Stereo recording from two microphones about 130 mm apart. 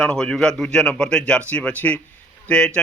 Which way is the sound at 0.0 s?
5° left (ahead or behind).